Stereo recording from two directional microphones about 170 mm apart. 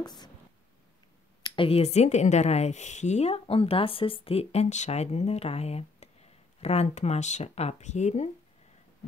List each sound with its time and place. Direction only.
0.0 s speech: 25° left (ahead or behind)
1.4 s a woman's voice: 30° left (ahead or behind)